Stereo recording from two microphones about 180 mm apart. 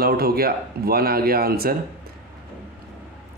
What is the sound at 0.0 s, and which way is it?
Speech, 55° right (ahead or behind).